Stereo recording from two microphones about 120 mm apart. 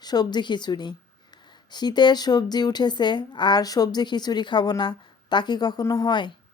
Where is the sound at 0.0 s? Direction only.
35° left (ahead or behind).